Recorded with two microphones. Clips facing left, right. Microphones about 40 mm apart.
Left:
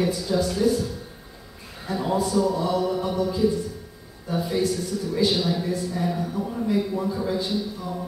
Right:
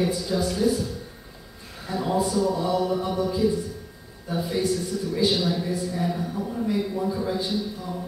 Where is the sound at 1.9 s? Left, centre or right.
Centre.